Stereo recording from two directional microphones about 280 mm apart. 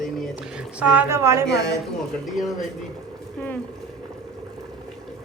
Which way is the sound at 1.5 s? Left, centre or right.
Left.